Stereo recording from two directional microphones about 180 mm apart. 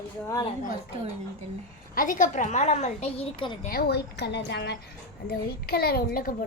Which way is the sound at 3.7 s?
60° left (ahead or behind).